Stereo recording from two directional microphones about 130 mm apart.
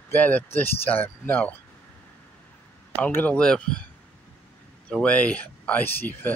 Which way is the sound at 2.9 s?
15° left (ahead or behind).